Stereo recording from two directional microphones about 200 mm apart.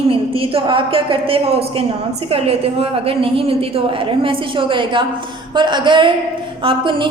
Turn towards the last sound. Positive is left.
turn(degrees=-25)  # may be behind; listen again after turning